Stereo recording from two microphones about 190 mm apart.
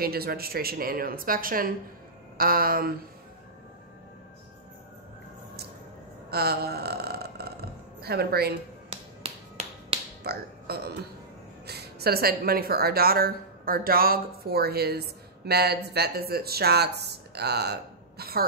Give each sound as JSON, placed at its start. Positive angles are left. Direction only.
{"t": 0.0, "sound": "a woman's voice", "side_deg": -55}
{"t": 6.3, "sound": "speech", "side_deg": -55}
{"t": 8.9, "sound": "finger snapping", "side_deg": -30}
{"t": 10.2, "sound": "speech", "side_deg": -55}